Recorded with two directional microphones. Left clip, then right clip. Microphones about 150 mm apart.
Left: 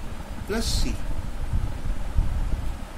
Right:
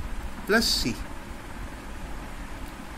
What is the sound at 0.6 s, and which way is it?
Speech, 40° left (ahead or behind).